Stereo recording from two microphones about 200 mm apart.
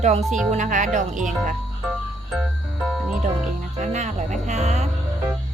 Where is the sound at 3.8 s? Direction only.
35° right (ahead or behind).